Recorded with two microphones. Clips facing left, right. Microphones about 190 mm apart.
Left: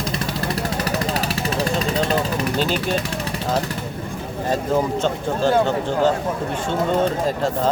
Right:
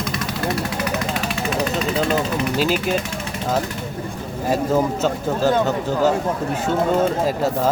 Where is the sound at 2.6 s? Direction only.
5° right (ahead or behind).